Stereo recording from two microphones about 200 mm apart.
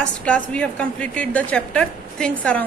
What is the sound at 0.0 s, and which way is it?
A woman's voice, 5° left (ahead or behind).